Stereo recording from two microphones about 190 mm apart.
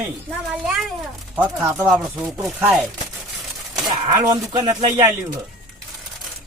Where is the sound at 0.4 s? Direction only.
Centre (ahead or behind).